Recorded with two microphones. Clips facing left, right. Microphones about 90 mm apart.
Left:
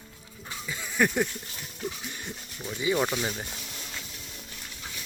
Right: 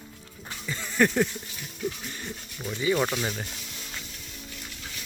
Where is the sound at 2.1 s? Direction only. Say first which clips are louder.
Right 1 dB; 10° left (ahead or behind).